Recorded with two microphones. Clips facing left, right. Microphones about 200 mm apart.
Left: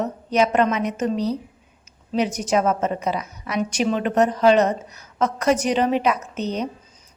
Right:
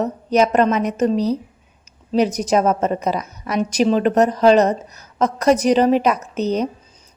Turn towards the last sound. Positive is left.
turn(degrees=-40)  # may be behind; listen again after turning